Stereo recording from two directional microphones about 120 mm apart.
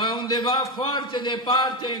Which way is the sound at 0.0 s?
40° left (ahead or behind).